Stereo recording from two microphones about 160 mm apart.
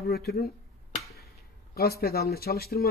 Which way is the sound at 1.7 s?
75° left (ahead or behind).